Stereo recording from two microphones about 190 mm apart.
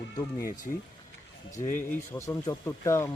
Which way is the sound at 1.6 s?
10° left (ahead or behind).